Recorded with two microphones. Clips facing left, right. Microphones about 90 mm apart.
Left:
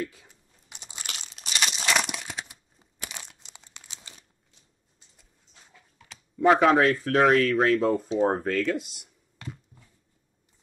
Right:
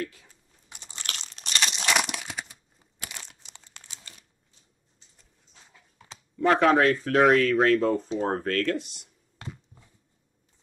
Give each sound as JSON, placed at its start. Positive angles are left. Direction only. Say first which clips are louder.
{"t": 0.0, "sound": "crunch", "louder": "left 1 dB", "side_deg": 15}
{"t": 3.1, "sound": "crumpling", "louder": "left 1 dB", "side_deg": 15}
{"t": 6.6, "sound": "speech", "louder": "even", "side_deg": 0}